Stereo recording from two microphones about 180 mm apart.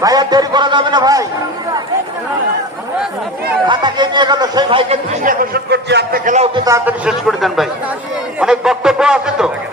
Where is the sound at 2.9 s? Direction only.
5° right (ahead or behind).